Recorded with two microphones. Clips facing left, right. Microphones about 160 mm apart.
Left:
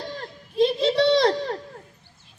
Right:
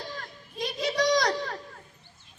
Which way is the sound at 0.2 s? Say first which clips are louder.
Left 14 dB; 25° left (ahead or behind).